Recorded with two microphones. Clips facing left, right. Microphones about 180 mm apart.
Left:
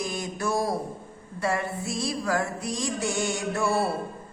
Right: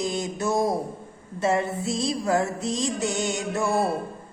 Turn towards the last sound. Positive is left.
turn(degrees=-20)  # may be behind; listen again after turning